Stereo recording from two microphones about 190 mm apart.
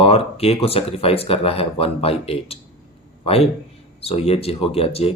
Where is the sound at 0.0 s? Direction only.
30° left (ahead or behind).